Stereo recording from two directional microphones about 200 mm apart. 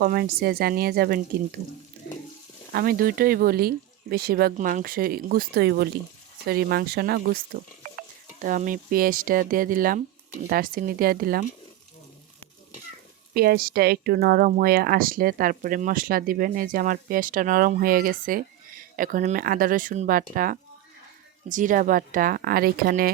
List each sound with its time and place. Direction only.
0.0 s speech: 50° right (ahead or behind)
2.7 s speech: 50° right (ahead or behind)
13.3 s speech: 50° right (ahead or behind)